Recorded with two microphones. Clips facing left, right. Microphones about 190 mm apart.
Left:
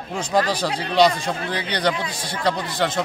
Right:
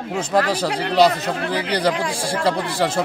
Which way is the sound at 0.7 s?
75° right (ahead or behind).